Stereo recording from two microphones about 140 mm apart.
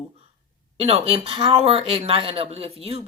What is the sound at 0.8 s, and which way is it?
Speech, 45° right (ahead or behind).